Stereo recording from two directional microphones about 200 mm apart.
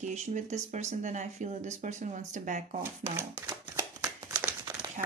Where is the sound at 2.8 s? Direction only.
10° right (ahead or behind).